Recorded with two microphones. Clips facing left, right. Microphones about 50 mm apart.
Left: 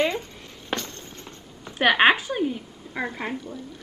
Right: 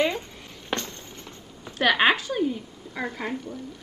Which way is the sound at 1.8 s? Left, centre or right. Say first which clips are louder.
Left 2 dB; left.